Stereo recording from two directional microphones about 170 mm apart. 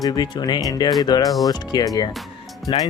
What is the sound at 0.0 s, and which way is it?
Speech, 25° left (ahead or behind).